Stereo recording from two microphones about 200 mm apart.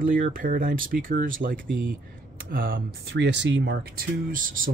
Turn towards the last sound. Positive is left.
turn(degrees=-45)  # may be behind; listen again after turning